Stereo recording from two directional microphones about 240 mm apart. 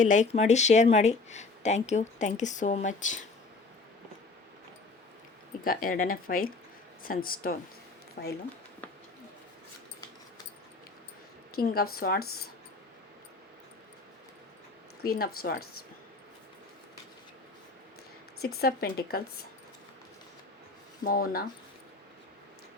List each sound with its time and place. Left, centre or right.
0.0 s speech: left
5.6 s speech: left
11.5 s speech: left
15.0 s speech: left
18.6 s speech: left
21.0 s speech: left